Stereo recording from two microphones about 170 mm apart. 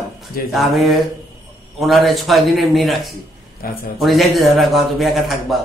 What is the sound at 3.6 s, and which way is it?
Speech, 60° left (ahead or behind).